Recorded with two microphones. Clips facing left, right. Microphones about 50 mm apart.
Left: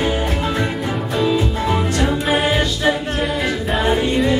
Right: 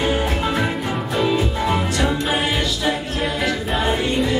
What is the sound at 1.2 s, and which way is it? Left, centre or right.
Music, centre.